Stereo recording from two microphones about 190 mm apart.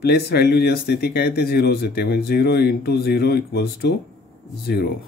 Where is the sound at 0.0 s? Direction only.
60° left (ahead or behind).